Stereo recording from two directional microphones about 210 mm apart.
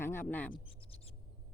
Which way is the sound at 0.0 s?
10° left (ahead or behind).